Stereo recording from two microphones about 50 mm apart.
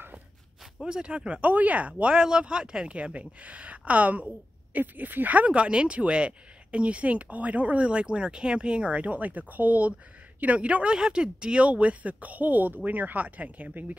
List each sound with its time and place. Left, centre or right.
0.8 s speech: centre
1.4 s speech: right
2.1 s speech: centre
7.9 s speech: centre
10.9 s speech: centre; by 13.9 s right